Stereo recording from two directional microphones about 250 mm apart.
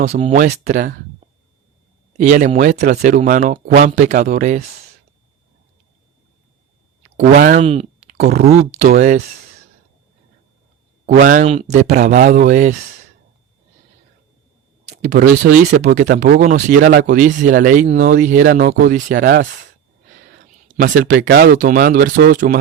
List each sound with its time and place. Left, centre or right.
0.0 s speech: right
1.2 s a sound: right
2.1 s speech: right
7.6 s speech: right
11.0 s speech: right
14.8 s speech: right
20.1 s a sound: right
21.2 s speech: right